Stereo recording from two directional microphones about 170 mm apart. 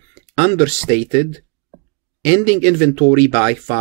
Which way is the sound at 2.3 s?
45° right (ahead or behind).